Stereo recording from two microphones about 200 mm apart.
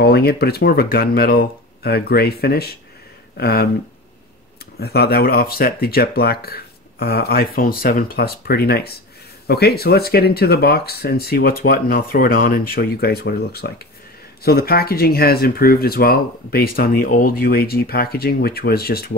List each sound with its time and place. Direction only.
0.0 s speech: 50° left (ahead or behind)
4.7 s speech: 50° left (ahead or behind)